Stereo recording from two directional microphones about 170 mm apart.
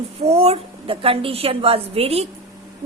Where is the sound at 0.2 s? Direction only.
35° right (ahead or behind).